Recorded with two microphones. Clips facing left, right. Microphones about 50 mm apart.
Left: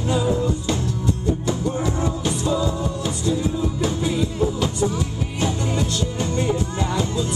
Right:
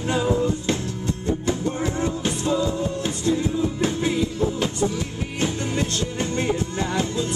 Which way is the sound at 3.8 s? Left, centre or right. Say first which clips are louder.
Left 1 dB; right.